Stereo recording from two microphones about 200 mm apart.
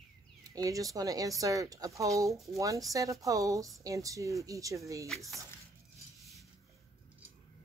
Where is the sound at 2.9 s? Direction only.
15° right (ahead or behind).